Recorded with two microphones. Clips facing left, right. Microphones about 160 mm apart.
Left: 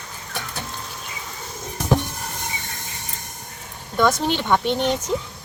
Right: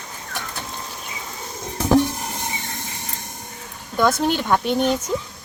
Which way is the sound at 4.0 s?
5° right (ahead or behind).